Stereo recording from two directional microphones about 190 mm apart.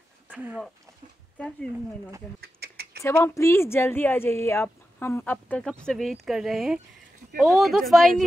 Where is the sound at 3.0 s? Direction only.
15° left (ahead or behind).